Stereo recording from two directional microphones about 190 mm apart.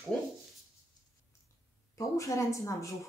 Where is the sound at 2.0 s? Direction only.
15° left (ahead or behind).